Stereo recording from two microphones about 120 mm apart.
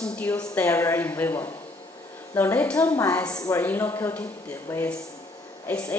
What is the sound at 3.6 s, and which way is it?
A woman's voice, 15° left (ahead or behind).